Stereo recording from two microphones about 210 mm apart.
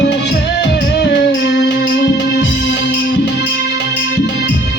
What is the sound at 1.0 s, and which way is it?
Music, 55° left (ahead or behind).